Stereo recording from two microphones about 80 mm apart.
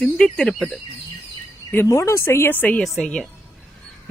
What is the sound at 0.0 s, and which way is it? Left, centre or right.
Speech, centre.